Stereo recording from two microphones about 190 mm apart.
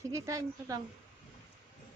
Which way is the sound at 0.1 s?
15° right (ahead or behind).